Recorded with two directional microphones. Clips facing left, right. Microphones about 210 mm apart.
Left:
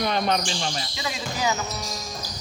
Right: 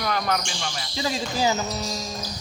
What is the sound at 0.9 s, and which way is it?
Speech, 30° right (ahead or behind).